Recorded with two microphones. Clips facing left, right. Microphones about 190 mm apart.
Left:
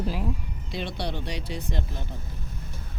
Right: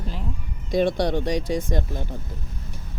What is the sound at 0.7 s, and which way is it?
Speech, 50° right (ahead or behind).